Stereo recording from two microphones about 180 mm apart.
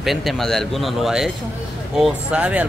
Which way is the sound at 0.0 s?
Centre (ahead or behind).